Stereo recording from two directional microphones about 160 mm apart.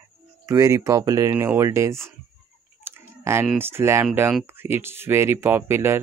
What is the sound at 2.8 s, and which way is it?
Chewing, 15° right (ahead or behind).